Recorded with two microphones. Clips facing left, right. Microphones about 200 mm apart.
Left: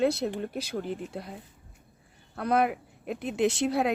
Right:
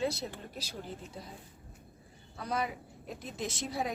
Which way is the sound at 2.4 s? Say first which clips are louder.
Left 9 dB; 60° left (ahead or behind).